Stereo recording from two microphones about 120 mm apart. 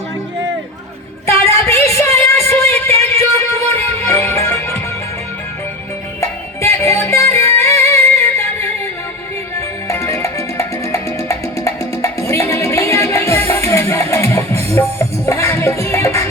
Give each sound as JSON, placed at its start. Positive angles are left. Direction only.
{"t": 1.3, "sound": "music", "side_deg": 20}
{"t": 6.1, "sound": "music", "side_deg": 25}
{"t": 9.6, "sound": "music", "side_deg": 25}